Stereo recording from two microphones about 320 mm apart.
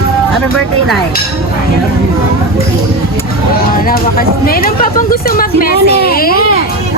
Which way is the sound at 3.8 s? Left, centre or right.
Left.